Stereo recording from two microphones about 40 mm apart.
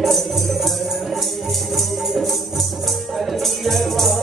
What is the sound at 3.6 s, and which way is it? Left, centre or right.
Music, centre.